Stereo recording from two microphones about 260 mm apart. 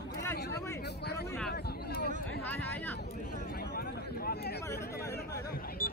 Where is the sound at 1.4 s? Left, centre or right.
Left.